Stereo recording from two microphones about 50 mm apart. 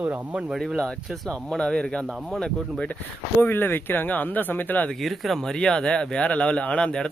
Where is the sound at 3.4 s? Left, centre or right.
Left.